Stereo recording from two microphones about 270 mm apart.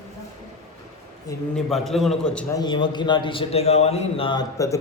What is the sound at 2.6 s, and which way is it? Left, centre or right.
A man's voice, centre.